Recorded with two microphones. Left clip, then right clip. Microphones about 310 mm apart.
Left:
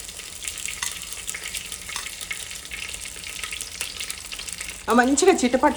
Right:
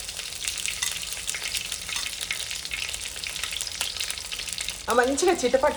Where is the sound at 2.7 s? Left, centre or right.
Centre.